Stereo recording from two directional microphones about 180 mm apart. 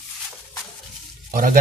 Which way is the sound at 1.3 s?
50° right (ahead or behind).